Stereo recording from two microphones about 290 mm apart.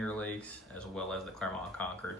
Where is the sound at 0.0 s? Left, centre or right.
Centre.